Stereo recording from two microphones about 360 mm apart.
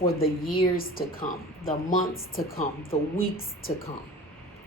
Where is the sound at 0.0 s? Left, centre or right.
Left.